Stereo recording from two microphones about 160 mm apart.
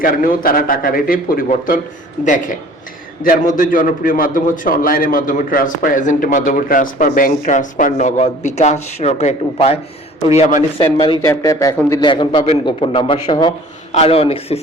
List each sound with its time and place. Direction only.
0.0 s a man's voice: 60° left (ahead or behind); by 10.6 s 40° left (ahead or behind)
11.2 s speech: 20° left (ahead or behind)
11.9 s a man's voice: 30° left (ahead or behind)
13.9 s a man's voice: 40° left (ahead or behind)